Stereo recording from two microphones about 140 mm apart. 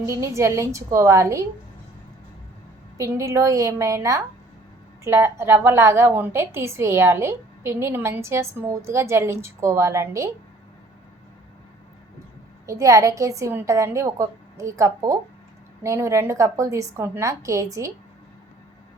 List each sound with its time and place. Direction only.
0.0 s a woman's voice: 20° right (ahead or behind)
3.0 s a woman's voice: 20° right (ahead or behind)
12.6 s a woman's voice: 20° right (ahead or behind)